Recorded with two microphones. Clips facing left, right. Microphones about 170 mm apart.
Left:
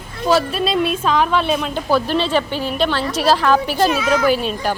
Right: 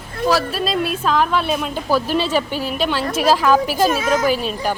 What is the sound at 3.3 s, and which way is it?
Speech, 5° right (ahead or behind).